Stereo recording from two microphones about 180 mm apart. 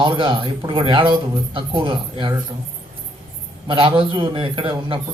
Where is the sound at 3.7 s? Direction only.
30° right (ahead or behind).